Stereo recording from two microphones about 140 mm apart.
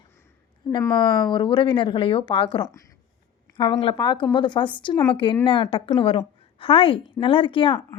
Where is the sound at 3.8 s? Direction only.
35° left (ahead or behind).